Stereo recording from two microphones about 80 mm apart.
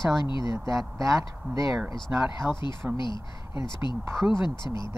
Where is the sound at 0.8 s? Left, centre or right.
Right.